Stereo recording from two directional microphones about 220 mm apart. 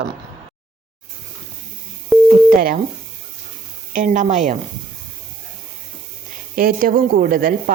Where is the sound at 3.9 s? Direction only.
35° right (ahead or behind).